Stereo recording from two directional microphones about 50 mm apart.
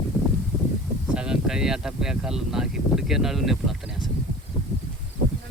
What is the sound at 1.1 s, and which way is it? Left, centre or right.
Speech, centre.